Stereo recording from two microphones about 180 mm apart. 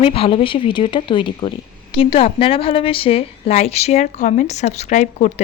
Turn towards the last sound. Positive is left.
turn(degrees=40)  # may be behind; listen again after turning